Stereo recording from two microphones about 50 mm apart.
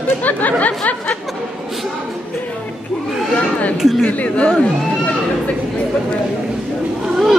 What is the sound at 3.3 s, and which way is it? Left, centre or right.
Chatter, left.